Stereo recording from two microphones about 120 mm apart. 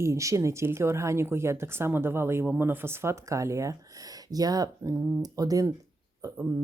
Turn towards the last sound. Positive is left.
turn(degrees=-20)  # may be behind; listen again after turning